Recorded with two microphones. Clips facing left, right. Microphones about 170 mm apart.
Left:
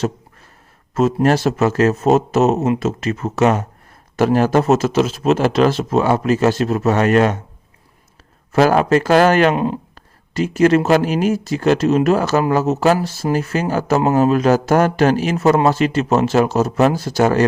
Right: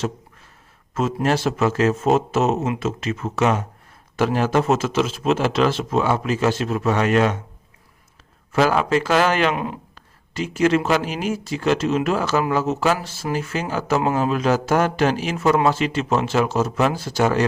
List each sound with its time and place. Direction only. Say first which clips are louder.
0.9 s a man's voice: left 6 dB; 40° left (ahead or behind)
8.5 s a man's voice: left 5 dB; 45° left (ahead or behind)